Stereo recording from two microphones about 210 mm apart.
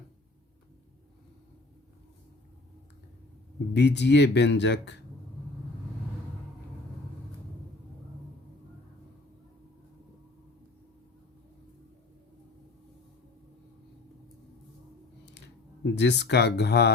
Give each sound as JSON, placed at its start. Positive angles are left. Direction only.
{"t": 3.8, "sound": "speech", "side_deg": 55}
{"t": 15.4, "sound": "speech", "side_deg": 55}